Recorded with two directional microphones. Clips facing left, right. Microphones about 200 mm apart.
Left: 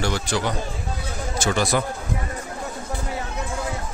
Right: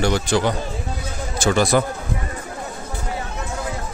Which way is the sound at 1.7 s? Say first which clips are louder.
Right 5 dB; 45° right (ahead or behind).